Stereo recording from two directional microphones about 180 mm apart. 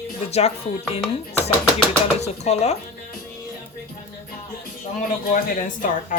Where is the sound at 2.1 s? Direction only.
35° left (ahead or behind).